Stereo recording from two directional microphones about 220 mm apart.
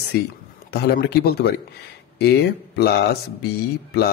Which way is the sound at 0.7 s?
45° left (ahead or behind).